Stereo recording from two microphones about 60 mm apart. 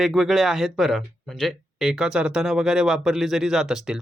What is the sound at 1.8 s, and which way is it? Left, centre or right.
Speech, centre.